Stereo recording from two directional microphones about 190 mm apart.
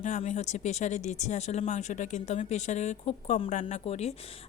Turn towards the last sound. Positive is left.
turn(degrees=35)  # may be behind; listen again after turning